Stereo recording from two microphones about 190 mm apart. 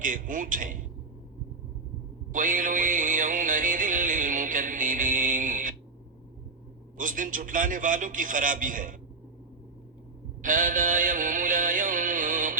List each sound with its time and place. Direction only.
0.0 s a man's voice: 45° right (ahead or behind)
2.3 s music: 45° right (ahead or behind)
6.9 s a man's voice: 45° right (ahead or behind)
10.4 s mantra: 45° right (ahead or behind)